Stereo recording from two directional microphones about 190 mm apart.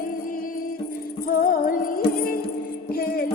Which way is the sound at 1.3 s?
50° left (ahead or behind).